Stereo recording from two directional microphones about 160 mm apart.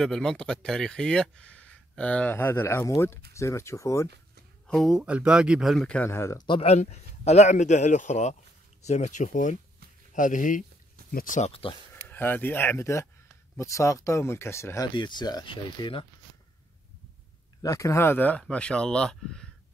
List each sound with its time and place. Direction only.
0.0 s speech: 5° left (ahead or behind)
4.6 s speech: centre (ahead or behind); by 6.4 s 15° left (ahead or behind)
6.4 s a man's voice: 35° left (ahead or behind); by 11.5 s 50° left (ahead or behind)
12.1 s speech: 10° left (ahead or behind)
15.0 s speech: 30° left (ahead or behind)
17.6 s speech: 20° left (ahead or behind)